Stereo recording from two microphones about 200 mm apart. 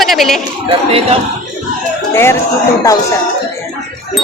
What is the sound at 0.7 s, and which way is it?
Speech, 30° right (ahead or behind).